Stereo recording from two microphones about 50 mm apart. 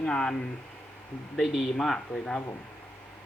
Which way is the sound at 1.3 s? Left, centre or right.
Centre.